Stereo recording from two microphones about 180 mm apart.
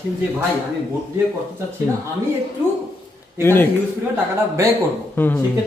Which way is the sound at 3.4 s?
10° left (ahead or behind).